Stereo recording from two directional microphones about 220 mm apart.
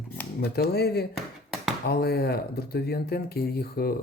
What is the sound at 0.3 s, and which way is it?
Speech, 45° left (ahead or behind).